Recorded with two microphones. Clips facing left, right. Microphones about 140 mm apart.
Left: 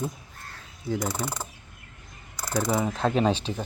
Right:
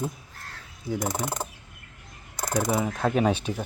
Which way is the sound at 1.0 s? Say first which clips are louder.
Right 1 dB; 20° right (ahead or behind).